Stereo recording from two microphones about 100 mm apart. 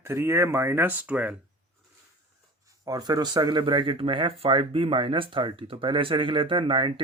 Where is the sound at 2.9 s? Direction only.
40° right (ahead or behind).